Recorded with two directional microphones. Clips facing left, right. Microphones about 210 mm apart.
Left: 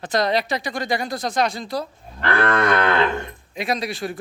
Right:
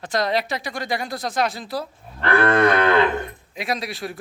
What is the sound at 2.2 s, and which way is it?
Cattle, 30° right (ahead or behind).